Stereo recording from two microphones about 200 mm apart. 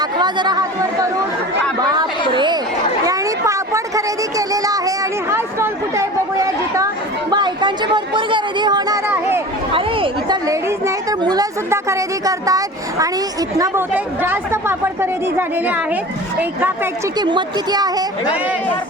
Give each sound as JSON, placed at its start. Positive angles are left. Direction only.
{"t": 0.0, "sound": "speech", "side_deg": -20}
{"t": 1.9, "sound": "chatter", "side_deg": -20}
{"t": 3.1, "sound": "a woman's voice", "side_deg": -15}
{"t": 17.2, "sound": "a child's voice", "side_deg": -20}